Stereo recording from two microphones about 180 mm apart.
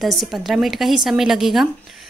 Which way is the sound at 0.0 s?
Centre (ahead or behind).